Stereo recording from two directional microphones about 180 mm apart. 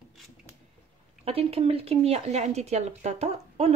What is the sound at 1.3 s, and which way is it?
Speech, 35° right (ahead or behind).